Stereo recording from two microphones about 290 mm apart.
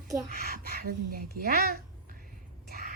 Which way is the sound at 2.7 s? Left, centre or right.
Right.